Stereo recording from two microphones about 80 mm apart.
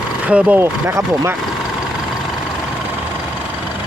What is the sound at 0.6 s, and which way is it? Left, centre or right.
Speech, right.